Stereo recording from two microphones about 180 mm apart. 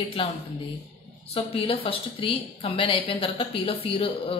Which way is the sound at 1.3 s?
30° left (ahead or behind).